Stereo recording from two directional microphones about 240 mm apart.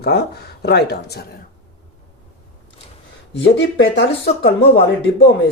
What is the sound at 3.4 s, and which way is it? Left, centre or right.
Speech, left.